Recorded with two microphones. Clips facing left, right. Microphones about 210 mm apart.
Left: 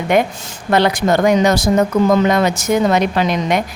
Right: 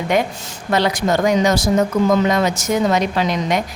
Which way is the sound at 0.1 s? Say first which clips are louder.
Left 4 dB; 55° left (ahead or behind).